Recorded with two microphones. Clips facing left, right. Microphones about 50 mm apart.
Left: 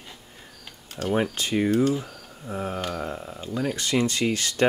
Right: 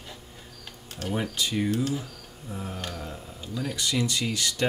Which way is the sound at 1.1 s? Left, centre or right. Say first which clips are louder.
Left 5 dB; left.